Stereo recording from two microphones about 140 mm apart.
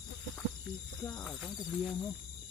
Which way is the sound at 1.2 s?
Centre (ahead or behind).